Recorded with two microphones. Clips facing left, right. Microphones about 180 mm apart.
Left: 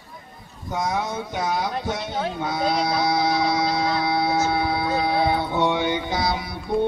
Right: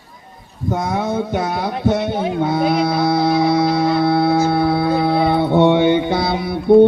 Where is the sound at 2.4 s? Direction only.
60° right (ahead or behind).